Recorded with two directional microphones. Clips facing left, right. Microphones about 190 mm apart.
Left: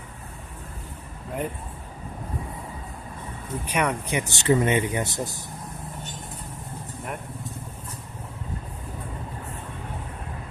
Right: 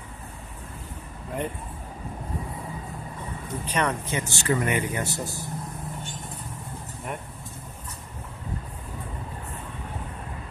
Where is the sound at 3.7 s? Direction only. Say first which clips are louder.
Left 1 dB; 10° left (ahead or behind).